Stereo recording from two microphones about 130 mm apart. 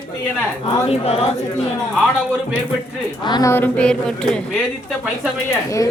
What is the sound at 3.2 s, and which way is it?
Speech, 35° left (ahead or behind).